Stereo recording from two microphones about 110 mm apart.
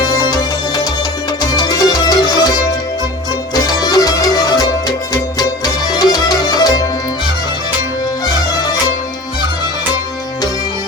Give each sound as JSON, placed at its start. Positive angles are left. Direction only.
{"t": 0.0, "sound": "music", "side_deg": 35}
{"t": 1.4, "sound": "music", "side_deg": 35}